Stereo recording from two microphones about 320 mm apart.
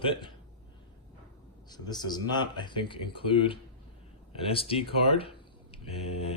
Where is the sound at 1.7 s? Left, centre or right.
Centre.